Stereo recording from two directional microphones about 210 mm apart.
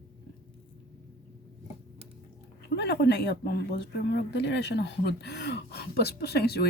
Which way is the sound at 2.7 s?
50° left (ahead or behind).